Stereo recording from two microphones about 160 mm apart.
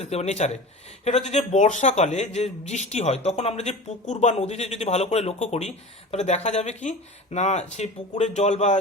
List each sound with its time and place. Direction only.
0.0 s speech: 45° left (ahead or behind)